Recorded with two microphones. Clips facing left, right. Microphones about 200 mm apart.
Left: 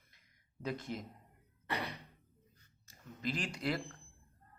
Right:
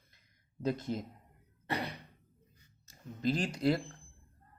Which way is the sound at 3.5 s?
25° right (ahead or behind).